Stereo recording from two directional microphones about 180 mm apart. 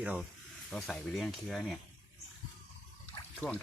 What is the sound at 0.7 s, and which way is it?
Speech, centre (ahead or behind).